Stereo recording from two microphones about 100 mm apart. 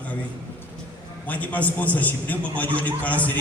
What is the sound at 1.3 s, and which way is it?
A man's voice, 15° left (ahead or behind).